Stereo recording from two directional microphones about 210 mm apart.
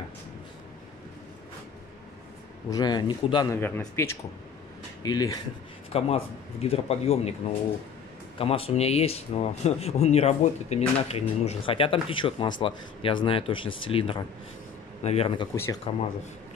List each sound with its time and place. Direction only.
2.7 s speech: 20° left (ahead or behind)
5.9 s speech: 30° left (ahead or behind)
8.4 s speech: 25° left (ahead or behind)
15.5 s speech: 10° left (ahead or behind)